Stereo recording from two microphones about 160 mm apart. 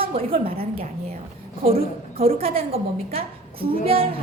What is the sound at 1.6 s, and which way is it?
A woman's voice, 40° right (ahead or behind).